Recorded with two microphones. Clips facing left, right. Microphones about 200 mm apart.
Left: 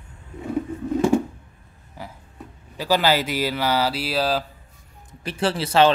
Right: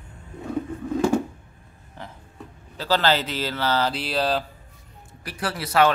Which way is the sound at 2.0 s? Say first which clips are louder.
Left 2 dB; 10° left (ahead or behind).